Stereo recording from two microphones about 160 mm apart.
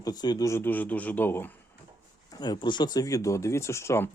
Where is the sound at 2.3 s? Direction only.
25° left (ahead or behind).